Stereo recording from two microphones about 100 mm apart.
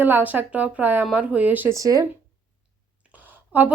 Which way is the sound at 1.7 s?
35° right (ahead or behind).